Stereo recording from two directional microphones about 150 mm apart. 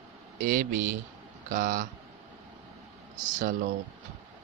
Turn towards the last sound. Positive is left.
turn(degrees=-60)  # may be behind; listen again after turning